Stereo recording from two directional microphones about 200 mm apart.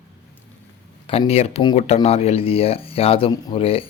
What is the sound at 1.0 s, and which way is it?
Speech, 25° left (ahead or behind).